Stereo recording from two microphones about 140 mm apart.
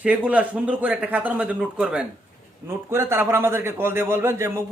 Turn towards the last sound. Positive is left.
turn(degrees=-20)  # may be behind; listen again after turning